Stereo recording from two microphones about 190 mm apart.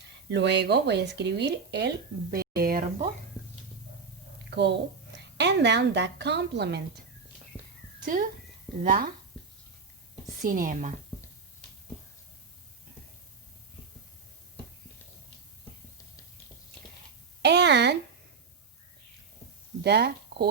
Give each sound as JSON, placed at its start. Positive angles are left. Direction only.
{"t": 0.3, "sound": "speech", "side_deg": -65}
{"t": 2.3, "sound": "speech", "side_deg": -55}
{"t": 4.5, "sound": "a woman's voice", "side_deg": -60}
{"t": 8.0, "sound": "speech", "side_deg": -45}
{"t": 10.4, "sound": "speech", "side_deg": -45}
{"t": 17.4, "sound": "speech", "side_deg": -65}
{"t": 19.8, "sound": "speech", "side_deg": -60}